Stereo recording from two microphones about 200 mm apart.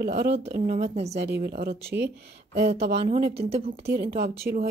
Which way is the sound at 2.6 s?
30° right (ahead or behind).